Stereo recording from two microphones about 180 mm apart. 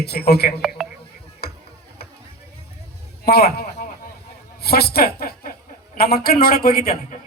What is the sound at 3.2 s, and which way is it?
Speech, 60° left (ahead or behind).